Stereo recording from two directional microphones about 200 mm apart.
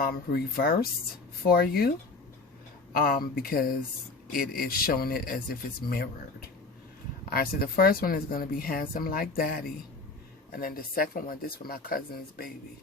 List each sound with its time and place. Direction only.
0.0 s speech: 50° left (ahead or behind)
2.9 s speech: 45° left (ahead or behind)